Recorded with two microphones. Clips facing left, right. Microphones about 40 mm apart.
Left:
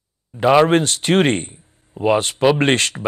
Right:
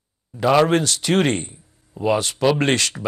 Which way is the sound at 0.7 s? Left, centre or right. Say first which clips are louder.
Left 3 dB; left.